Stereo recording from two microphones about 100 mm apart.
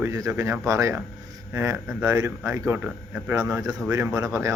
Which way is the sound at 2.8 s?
15° right (ahead or behind).